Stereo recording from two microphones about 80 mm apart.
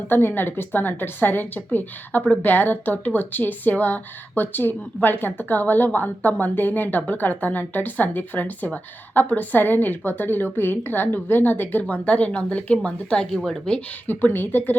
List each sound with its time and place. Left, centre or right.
0.1 s a woman's voice: left; by 13.8 s centre
14.1 s a woman's voice: left